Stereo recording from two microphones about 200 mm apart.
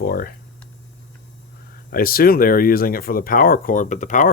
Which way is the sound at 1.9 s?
50° left (ahead or behind).